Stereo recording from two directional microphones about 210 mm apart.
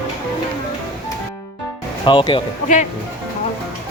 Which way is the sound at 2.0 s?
25° left (ahead or behind).